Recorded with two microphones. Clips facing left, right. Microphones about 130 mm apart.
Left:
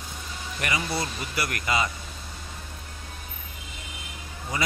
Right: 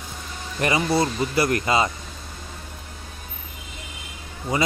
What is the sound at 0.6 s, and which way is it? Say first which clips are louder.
Speech: right 8 dB; 30° right (ahead or behind).